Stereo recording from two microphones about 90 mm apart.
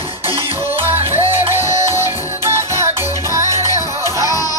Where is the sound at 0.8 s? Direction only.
25° right (ahead or behind).